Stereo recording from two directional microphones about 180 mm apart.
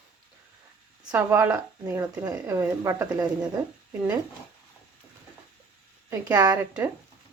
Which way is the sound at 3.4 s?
5° right (ahead or behind).